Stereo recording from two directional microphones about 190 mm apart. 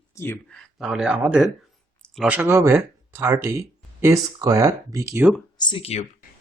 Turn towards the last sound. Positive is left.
turn(degrees=30)  # may be behind; listen again after turning